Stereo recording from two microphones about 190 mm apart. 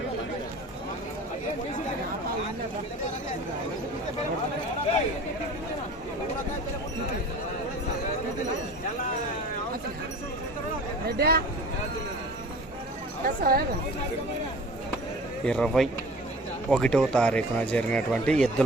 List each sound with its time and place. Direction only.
11.2 s speech: 55° right (ahead or behind)
13.2 s speech: 50° right (ahead or behind)
15.4 s speech: 5° left (ahead or behind)